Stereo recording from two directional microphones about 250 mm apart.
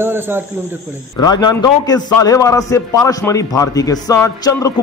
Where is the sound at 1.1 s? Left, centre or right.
Centre.